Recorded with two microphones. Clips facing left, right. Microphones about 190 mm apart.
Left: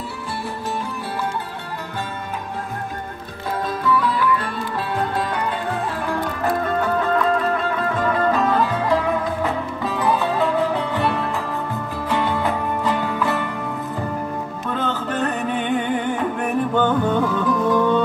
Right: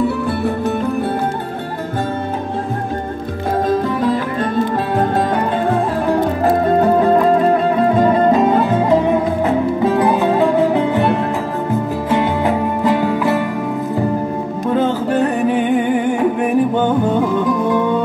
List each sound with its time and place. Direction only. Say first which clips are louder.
0.0 s music: right 12 dB; 60° right (ahead or behind)
3.6 s music: right 4 dB; 45° right (ahead or behind)
6.1 s music: right 7 dB; 25° right (ahead or behind)
7.0 s music: right 7 dB; 40° right (ahead or behind); by 11.1 s 15° right (ahead or behind)
12.1 s music: right 5 dB; 15° right (ahead or behind)
15.0 s music: right 8 dB; 10° right (ahead or behind)